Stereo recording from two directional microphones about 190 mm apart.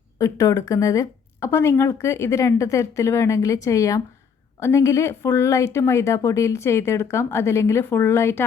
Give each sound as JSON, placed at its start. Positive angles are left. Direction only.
{"t": 0.2, "sound": "a woman's voice", "side_deg": 15}